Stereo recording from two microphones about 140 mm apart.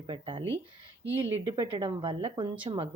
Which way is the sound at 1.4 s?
40° right (ahead or behind).